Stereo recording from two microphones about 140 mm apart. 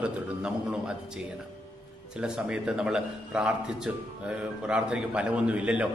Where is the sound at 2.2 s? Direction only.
5° right (ahead or behind).